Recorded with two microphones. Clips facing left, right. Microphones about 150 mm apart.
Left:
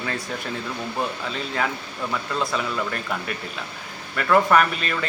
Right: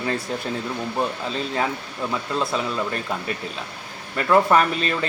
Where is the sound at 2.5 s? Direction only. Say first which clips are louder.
Right 1 dB; 25° right (ahead or behind).